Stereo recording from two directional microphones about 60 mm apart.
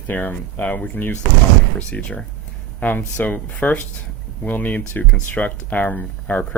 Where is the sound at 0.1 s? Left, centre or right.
Left.